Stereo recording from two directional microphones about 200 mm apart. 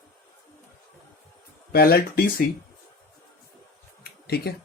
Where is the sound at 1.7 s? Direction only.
50° left (ahead or behind).